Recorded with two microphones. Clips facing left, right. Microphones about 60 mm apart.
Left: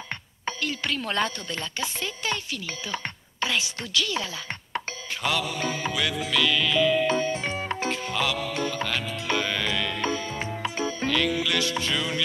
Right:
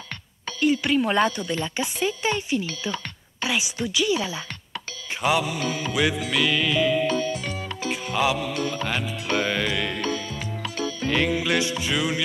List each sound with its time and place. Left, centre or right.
0.6 s a woman's voice: centre
5.6 s music: left
6.3 s a woman's voice: centre
7.1 s music: left
7.9 s music: centre
8.5 s music: left
8.8 s speech: centre
9.4 s music: centre
10.0 s music: left
11.1 s a woman's voice: right